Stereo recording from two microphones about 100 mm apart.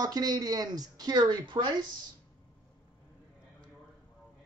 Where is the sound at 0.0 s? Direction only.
40° right (ahead or behind).